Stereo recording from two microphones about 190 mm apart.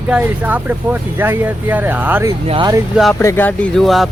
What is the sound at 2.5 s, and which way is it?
Speech, 25° right (ahead or behind).